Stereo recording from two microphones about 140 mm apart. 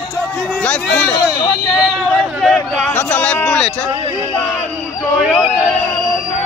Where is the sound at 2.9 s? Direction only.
10° left (ahead or behind).